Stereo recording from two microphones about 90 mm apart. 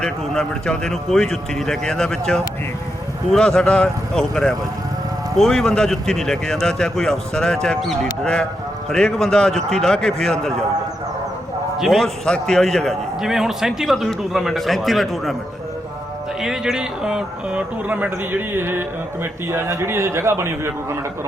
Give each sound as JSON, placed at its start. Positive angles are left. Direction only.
{"t": 0.0, "sound": "a man's voice", "side_deg": 10}
{"t": 11.8, "sound": "a man's voice", "side_deg": 0}
{"t": 16.4, "sound": "speech", "side_deg": -5}